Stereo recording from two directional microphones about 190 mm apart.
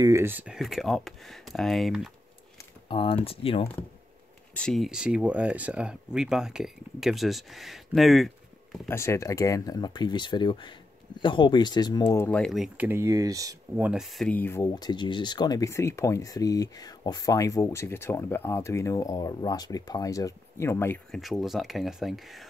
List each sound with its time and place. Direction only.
0.0 s speech: 15° right (ahead or behind)
2.9 s speech: 25° left (ahead or behind)
4.6 s speech: centre (ahead or behind)
8.8 s speech: 15° left (ahead or behind)
12.3 s speech: 5° left (ahead or behind); by 13.8 s 15° right (ahead or behind)
13.8 s speech: centre (ahead or behind)
21.1 s speech: centre (ahead or behind)